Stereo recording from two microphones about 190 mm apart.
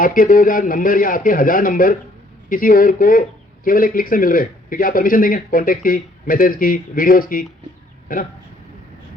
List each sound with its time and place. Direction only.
0.0 s speech: 45° left (ahead or behind)